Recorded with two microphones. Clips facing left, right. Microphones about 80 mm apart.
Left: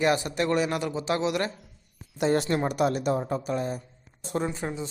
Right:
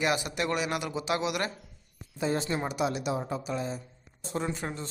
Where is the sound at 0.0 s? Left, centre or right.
Left.